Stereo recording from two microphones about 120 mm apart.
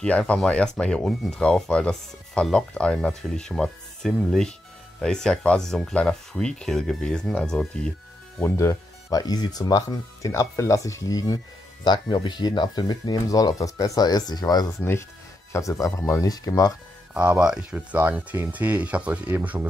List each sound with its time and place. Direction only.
0.0 s speech: 10° left (ahead or behind)
8.4 s speech: 20° left (ahead or behind)
11.8 s speech: 40° left (ahead or behind)
14.8 s speech: 20° left (ahead or behind)
17.1 s speech: 10° right (ahead or behind)